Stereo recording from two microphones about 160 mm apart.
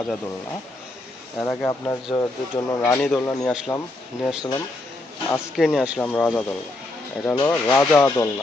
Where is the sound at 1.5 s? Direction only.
15° left (ahead or behind).